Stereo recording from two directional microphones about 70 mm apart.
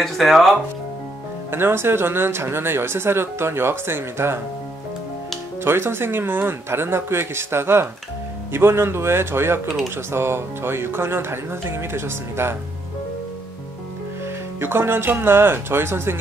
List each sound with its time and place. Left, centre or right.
0.0 s speech: centre
1.5 s speech: right
5.6 s speech: right
14.6 s speech: right